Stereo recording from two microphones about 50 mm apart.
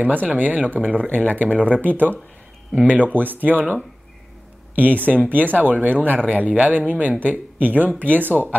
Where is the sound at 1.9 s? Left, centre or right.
Left.